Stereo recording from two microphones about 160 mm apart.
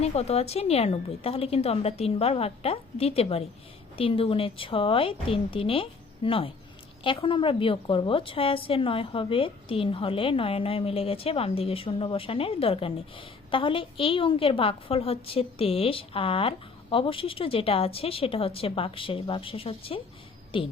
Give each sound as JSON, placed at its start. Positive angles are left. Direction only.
{"t": 0.0, "sound": "a woman's voice", "side_deg": 40}